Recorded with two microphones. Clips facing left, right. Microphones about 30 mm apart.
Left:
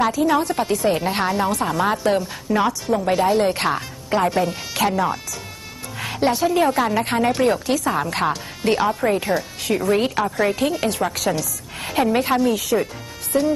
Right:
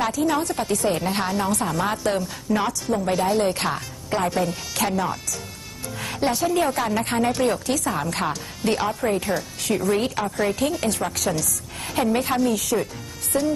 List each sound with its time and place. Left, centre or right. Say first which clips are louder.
0.0 s a woman's voice: left 4 dB; centre